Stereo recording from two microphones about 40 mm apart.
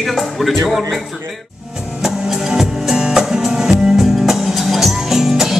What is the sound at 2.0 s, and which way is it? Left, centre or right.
Music, centre.